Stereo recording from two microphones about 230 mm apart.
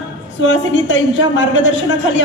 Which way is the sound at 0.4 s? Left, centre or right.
Left.